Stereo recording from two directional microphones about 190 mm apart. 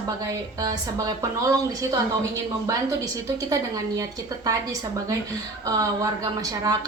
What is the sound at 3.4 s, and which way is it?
A woman's voice, 20° right (ahead or behind).